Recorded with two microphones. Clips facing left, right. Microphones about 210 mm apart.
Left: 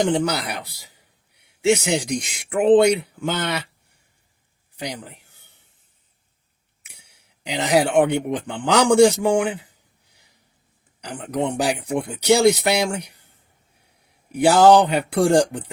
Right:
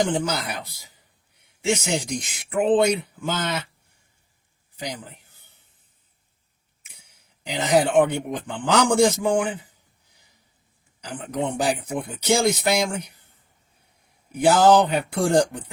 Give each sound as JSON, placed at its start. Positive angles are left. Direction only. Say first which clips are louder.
{"t": 0.0, "sound": "speech", "louder": "left 3 dB", "side_deg": 70}
{"t": 3.0, "sound": "a sound", "louder": "left 2 dB", "side_deg": 70}
{"t": 6.8, "sound": "speech", "louder": "left 2 dB", "side_deg": 70}
{"t": 14.3, "sound": "speech", "louder": "left 3 dB", "side_deg": 70}